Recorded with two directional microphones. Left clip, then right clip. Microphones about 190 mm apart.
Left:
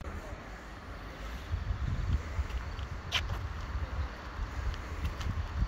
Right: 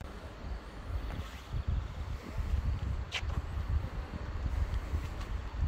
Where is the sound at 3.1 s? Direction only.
Centre (ahead or behind).